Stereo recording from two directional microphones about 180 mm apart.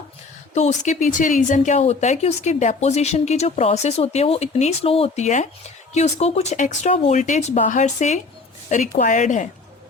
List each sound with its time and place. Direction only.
0.5 s a woman's voice: 40° left (ahead or behind)